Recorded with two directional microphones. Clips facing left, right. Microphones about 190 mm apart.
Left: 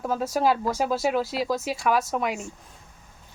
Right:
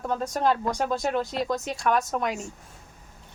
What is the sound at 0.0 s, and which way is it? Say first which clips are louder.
Speech: left 2 dB; 5° left (ahead or behind).